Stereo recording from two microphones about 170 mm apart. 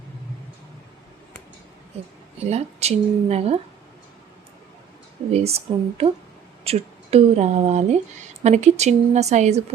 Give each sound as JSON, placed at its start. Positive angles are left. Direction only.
{"t": 2.4, "sound": "speech", "side_deg": -40}
{"t": 5.3, "sound": "speech", "side_deg": -35}